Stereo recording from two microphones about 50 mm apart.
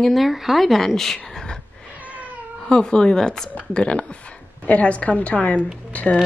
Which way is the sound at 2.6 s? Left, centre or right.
Centre.